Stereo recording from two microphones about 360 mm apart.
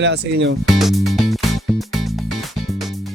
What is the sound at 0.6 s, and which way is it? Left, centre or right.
Music, centre.